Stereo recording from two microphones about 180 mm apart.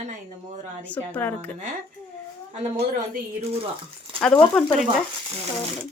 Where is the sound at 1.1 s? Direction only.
10° left (ahead or behind).